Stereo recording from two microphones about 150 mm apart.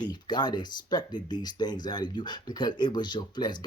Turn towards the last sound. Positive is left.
turn(degrees=30)  # may be behind; listen again after turning